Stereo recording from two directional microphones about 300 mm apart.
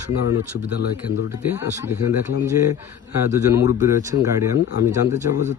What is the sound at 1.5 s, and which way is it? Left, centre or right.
Speech, centre.